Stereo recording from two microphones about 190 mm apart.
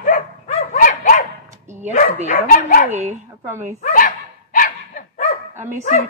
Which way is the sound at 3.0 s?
40° right (ahead or behind).